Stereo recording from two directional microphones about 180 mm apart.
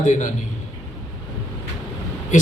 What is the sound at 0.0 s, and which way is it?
Speech, 40° left (ahead or behind).